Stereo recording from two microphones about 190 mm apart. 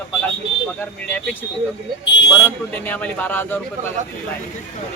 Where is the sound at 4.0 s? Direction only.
40° right (ahead or behind).